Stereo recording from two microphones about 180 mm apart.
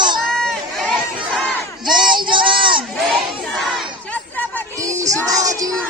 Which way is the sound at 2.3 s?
25° right (ahead or behind).